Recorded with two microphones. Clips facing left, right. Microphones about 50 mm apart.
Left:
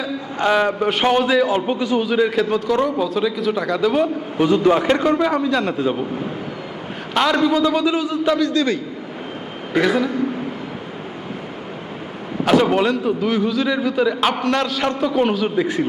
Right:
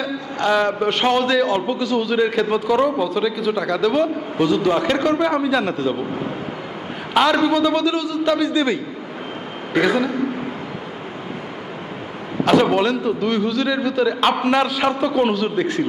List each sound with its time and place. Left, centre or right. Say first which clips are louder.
0.3 s a man's voice: left 1 dB; centre
0.7 s a man's voice: left 1 dB; centre
2.0 s a man's voice: even; centre
4.4 s a man's voice: left 3 dB; left; by 5.7 s centre
7.1 s a man's voice: right 1 dB; centre
7.6 s a man's voice: even; centre
7.9 s a man's voice: left 1 dB; left
8.4 s a man's voice: even; centre
9.7 s a man's voice: even; centre
12.7 s a man's voice: left 1 dB; centre
14.5 s a man's voice: right 2 dB; centre